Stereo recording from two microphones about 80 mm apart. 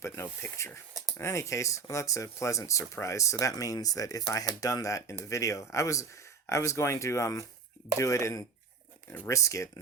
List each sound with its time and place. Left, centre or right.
0.0 s speech: left